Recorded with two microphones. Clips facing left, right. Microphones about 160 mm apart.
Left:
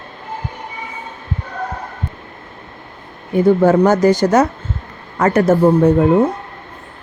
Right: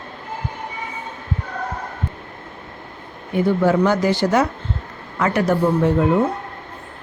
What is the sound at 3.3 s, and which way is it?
Speech, 45° left (ahead or behind).